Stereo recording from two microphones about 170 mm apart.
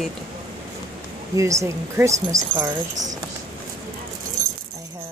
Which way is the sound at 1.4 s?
20° right (ahead or behind).